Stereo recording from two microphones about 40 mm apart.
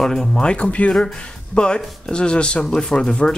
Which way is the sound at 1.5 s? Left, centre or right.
Left.